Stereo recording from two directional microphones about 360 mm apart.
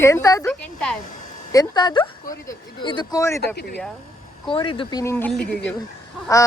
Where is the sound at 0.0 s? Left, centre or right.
Centre.